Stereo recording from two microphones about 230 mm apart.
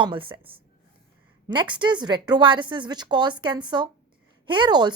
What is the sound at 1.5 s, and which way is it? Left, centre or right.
A woman's voice, centre.